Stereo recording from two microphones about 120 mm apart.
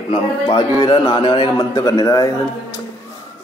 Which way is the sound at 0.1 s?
45° left (ahead or behind).